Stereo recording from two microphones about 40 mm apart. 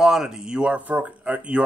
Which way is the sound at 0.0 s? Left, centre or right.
Centre.